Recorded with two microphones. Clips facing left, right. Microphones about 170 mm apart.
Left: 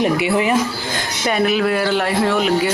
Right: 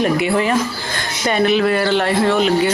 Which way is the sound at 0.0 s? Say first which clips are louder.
Even; 15° left (ahead or behind).